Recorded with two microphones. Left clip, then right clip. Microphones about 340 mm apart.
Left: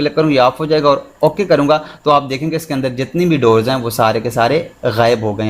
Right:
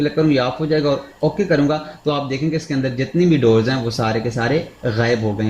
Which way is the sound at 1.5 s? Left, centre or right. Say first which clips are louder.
Left 6 dB; centre.